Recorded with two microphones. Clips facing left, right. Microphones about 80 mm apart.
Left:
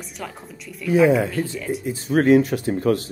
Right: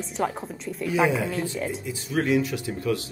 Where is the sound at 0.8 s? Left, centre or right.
Right.